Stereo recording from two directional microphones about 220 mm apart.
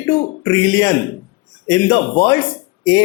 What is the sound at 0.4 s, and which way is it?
Speech, 15° left (ahead or behind).